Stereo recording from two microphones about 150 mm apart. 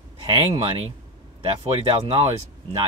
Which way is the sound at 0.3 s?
40° right (ahead or behind).